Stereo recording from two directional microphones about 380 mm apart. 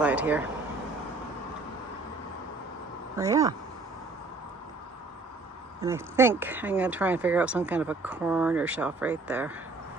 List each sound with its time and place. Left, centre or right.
0.0 s speech: centre
3.2 s speech: centre
5.8 s speech: centre